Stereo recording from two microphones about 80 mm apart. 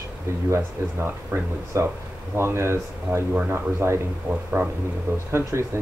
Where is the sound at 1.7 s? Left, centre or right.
Right.